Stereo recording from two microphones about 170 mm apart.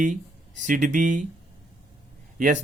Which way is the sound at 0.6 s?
45° right (ahead or behind).